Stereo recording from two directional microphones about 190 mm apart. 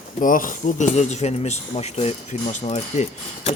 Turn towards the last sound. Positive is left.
turn(degrees=35)  # may be behind; listen again after turning